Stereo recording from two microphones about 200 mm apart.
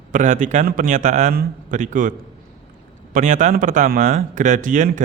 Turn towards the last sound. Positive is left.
turn(degrees=-40)  # may be behind; listen again after turning